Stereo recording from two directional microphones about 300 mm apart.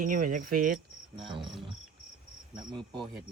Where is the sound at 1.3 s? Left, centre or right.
Centre.